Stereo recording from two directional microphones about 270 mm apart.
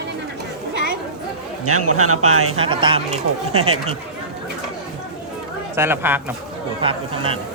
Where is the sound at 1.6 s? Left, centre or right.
Right.